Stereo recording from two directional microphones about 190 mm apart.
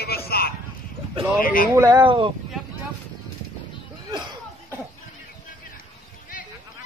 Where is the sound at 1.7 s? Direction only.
20° right (ahead or behind).